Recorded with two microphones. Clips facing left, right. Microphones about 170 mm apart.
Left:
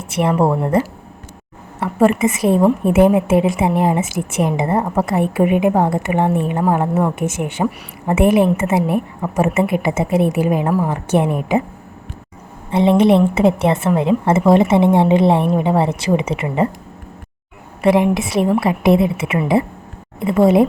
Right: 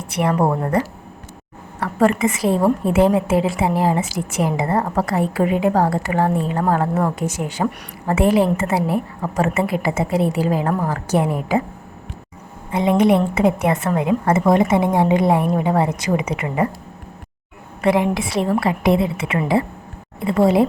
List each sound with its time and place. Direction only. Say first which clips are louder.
0.0 s a woman's voice: left 2 dB; 25° left (ahead or behind)
7.2 s a woman's voice: left 2 dB; 25° left (ahead or behind)
12.7 s a woman's voice: left 3 dB; 25° left (ahead or behind)
17.8 s a woman's voice: left 3 dB; 20° left (ahead or behind)